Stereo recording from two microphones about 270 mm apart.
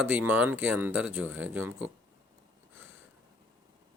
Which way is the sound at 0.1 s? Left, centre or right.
Centre.